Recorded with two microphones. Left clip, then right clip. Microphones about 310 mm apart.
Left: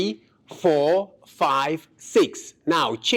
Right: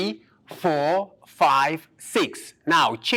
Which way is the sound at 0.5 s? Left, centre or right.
Right.